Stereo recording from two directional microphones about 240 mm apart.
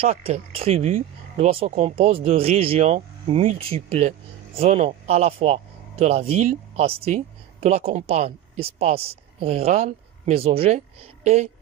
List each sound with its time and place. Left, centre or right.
0.0 s frog: right
4.6 s speech: right